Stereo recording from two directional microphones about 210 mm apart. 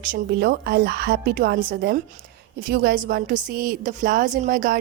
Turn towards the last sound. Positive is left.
turn(degrees=-40)  # may be behind; listen again after turning